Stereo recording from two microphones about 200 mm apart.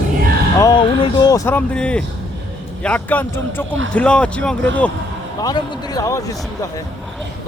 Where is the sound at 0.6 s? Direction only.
20° left (ahead or behind); by 2.0 s 5° left (ahead or behind).